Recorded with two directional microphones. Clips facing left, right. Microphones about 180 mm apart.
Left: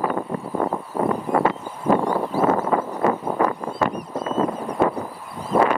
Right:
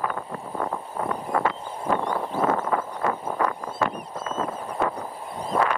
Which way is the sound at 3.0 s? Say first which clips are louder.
Left 5 dB; 25° left (ahead or behind).